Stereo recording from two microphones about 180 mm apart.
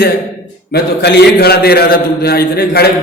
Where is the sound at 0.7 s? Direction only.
65° left (ahead or behind).